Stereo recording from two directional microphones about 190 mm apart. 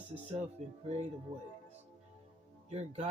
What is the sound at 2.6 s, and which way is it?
Speech, 35° right (ahead or behind).